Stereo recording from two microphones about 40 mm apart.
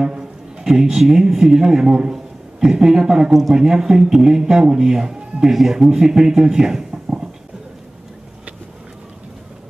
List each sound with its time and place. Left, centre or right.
0.0 s a man's voice: centre